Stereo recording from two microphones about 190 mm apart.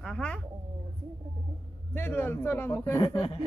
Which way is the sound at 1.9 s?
10° left (ahead or behind).